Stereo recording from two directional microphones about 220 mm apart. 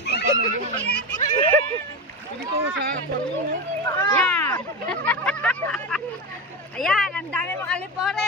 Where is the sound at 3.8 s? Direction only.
15° left (ahead or behind).